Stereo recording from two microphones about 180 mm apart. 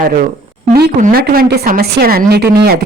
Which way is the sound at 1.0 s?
55° right (ahead or behind).